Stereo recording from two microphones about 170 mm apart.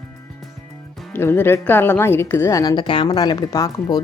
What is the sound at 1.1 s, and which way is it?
A woman's voice, 15° left (ahead or behind).